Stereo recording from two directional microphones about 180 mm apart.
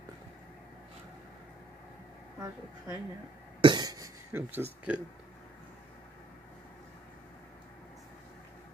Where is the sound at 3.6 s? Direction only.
25° right (ahead or behind).